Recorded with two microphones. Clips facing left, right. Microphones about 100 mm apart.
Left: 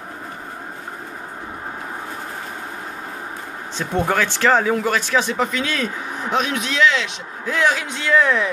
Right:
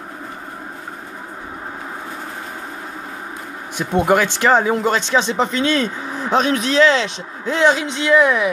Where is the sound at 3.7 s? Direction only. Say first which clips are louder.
Right 5 dB; 15° right (ahead or behind).